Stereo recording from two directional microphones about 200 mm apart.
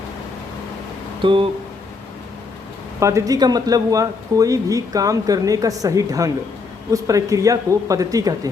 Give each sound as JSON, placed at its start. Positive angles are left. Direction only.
{"t": 1.2, "sound": "speech", "side_deg": -25}
{"t": 3.0, "sound": "speech", "side_deg": -15}